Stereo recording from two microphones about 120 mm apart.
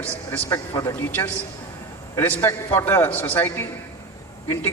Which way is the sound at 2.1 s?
20° left (ahead or behind).